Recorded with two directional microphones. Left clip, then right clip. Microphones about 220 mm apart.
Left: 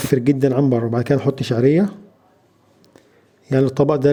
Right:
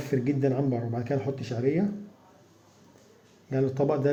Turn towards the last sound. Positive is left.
turn(degrees=45)  # may be behind; listen again after turning